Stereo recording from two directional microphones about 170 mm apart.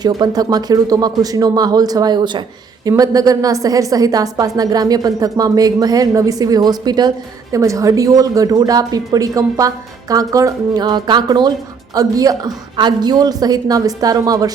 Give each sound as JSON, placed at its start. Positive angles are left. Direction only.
{"t": 0.0, "sound": "a woman's voice", "side_deg": -25}